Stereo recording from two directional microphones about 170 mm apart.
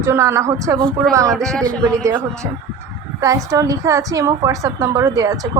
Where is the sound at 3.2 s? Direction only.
20° right (ahead or behind).